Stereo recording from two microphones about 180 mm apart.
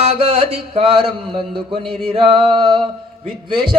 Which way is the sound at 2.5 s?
25° right (ahead or behind).